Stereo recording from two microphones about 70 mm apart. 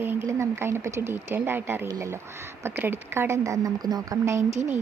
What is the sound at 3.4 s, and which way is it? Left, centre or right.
Speech, right.